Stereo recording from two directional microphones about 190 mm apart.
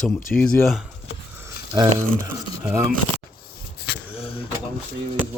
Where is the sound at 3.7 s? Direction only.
55° left (ahead or behind).